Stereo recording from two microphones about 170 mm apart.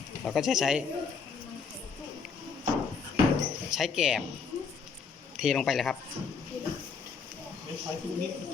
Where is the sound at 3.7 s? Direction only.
5° right (ahead or behind).